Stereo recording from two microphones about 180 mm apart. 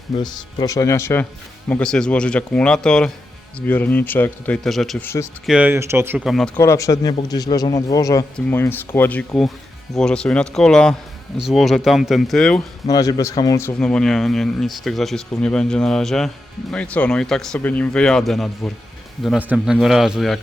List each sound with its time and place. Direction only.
0.2 s speech: 20° left (ahead or behind); by 6.2 s 10° right (ahead or behind)
6.2 s speech: centre (ahead or behind)
6.6 s a man's voice: 15° left (ahead or behind)
12.9 s speech: 20° left (ahead or behind); by 20.4 s centre (ahead or behind)